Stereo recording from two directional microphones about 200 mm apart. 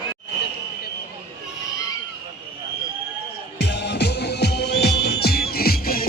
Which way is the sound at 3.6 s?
55° left (ahead or behind).